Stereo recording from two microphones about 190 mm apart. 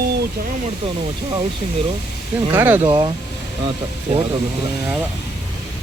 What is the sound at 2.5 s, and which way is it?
Speech, 10° right (ahead or behind).